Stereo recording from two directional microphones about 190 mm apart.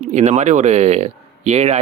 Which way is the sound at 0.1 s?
35° right (ahead or behind).